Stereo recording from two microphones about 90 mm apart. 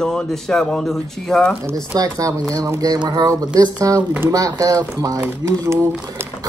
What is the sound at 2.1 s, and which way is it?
Speech, 40° right (ahead or behind).